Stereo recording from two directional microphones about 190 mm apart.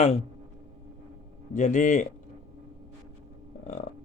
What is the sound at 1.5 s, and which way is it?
Speech, 40° left (ahead or behind).